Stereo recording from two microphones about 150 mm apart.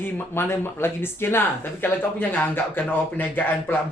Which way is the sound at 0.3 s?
15° left (ahead or behind).